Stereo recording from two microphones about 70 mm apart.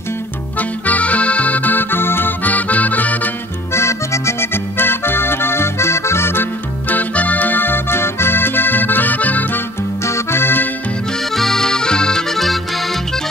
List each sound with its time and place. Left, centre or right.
0.6 s accordion: left
3.7 s accordion: left
6.9 s accordion: left
10.0 s music: left
11.3 s accordion: centre